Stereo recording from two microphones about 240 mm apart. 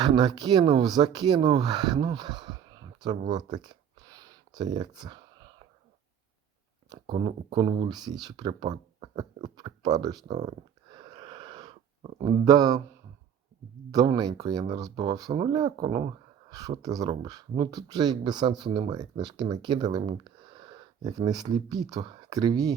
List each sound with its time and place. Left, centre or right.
0.0 s speech: centre
6.9 s speech: centre
9.6 s a sound: centre
13.9 s speech: centre